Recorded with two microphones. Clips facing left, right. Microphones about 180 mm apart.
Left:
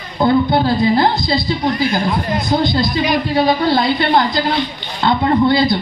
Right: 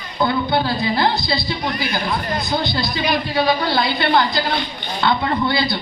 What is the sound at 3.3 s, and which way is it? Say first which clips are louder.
Speech: left 4 dB; 25° left (ahead or behind).